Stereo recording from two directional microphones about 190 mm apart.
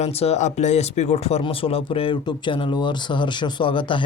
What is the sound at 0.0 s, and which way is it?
Speech, 35° left (ahead or behind).